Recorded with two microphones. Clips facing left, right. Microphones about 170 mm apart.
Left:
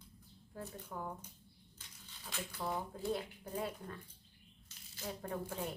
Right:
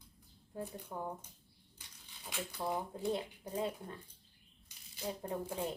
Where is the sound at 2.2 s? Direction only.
15° right (ahead or behind).